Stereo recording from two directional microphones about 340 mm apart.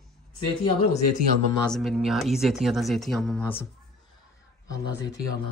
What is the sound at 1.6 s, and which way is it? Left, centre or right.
Speech, centre.